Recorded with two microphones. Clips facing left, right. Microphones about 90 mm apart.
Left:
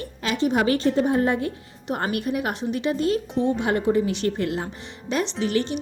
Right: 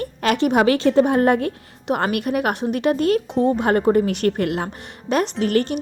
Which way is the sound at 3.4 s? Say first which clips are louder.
Right 5 dB; 45° right (ahead or behind).